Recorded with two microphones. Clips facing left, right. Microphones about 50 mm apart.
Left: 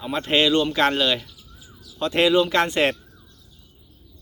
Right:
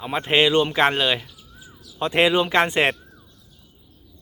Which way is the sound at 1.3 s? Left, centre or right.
Centre.